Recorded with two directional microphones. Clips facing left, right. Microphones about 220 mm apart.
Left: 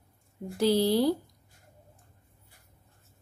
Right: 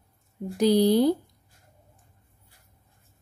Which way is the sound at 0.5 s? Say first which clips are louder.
Right 4 dB; 15° right (ahead or behind).